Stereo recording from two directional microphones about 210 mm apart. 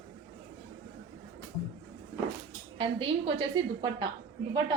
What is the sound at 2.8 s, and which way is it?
A woman's voice, 25° right (ahead or behind).